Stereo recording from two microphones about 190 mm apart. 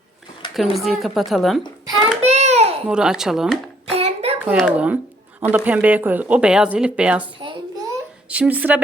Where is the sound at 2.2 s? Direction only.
35° right (ahead or behind).